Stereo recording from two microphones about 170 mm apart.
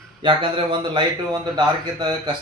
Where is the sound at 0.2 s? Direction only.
30° right (ahead or behind).